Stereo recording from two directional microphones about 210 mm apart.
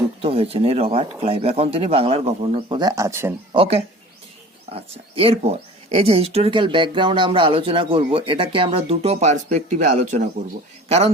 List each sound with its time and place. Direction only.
0.2 s speech: 30° right (ahead or behind); by 3.3 s 10° right (ahead or behind)
3.5 s speech: 25° right (ahead or behind)